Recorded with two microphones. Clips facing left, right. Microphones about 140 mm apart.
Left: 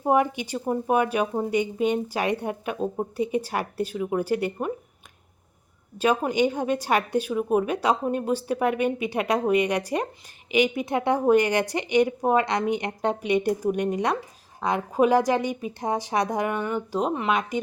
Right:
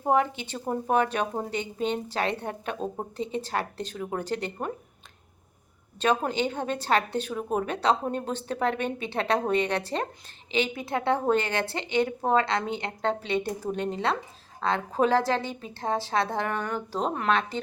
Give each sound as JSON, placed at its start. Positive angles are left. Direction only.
{"t": 0.0, "sound": "speech", "side_deg": 15}
{"t": 6.0, "sound": "speech", "side_deg": 10}